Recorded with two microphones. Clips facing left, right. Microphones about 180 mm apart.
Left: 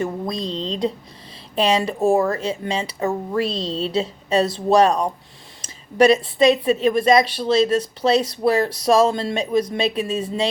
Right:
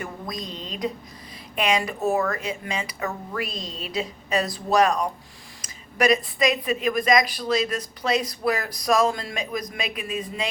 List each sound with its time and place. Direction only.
0.0 s a woman's voice: 30° left (ahead or behind)